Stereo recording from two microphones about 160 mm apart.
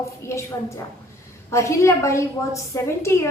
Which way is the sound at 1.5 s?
20° left (ahead or behind).